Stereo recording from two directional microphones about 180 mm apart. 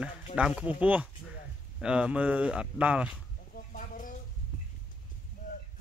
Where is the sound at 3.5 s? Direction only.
50° left (ahead or behind).